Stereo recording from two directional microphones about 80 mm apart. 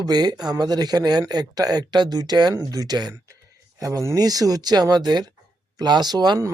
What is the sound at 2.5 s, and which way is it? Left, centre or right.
Speech, right.